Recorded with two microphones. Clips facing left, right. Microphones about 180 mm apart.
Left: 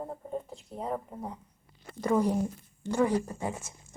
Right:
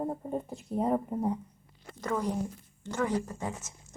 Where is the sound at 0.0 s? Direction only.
15° right (ahead or behind).